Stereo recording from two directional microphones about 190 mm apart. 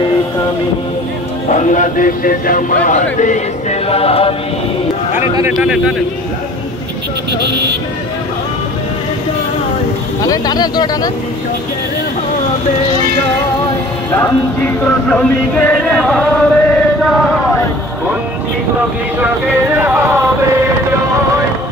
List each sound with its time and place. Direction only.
1.5 s a man's voice: 40° left (ahead or behind)
5.6 s a man's voice: 5° right (ahead or behind)
10.2 s speech: 20° left (ahead or behind)
14.1 s music: 10° left (ahead or behind)
19.1 s speech: 10° right (ahead or behind)